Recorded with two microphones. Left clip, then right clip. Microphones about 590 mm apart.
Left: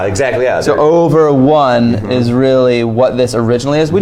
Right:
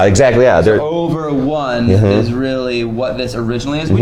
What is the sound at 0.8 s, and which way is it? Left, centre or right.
Speech, left.